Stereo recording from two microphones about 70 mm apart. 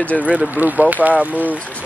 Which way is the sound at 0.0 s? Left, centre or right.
Left.